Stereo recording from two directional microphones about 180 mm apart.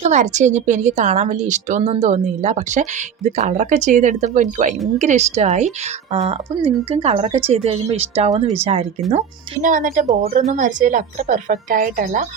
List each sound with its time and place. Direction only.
0.0 s a woman's voice: 40° right (ahead or behind)